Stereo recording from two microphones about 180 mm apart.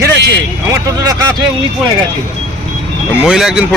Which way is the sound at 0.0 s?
65° right (ahead or behind).